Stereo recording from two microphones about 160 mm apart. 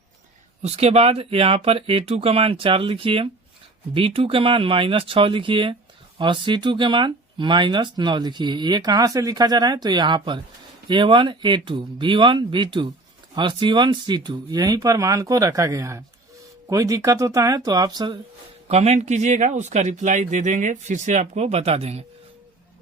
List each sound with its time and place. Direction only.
0.6 s speech: 40° right (ahead or behind); by 18.2 s 25° right (ahead or behind)
18.7 s a man's voice: 45° right (ahead or behind)